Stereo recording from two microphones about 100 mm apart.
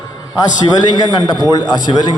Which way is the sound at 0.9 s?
45° left (ahead or behind).